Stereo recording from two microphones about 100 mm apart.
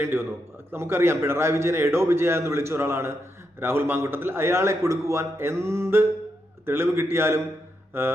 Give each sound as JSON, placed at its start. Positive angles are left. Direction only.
{"t": 0.0, "sound": "a man's voice", "side_deg": -25}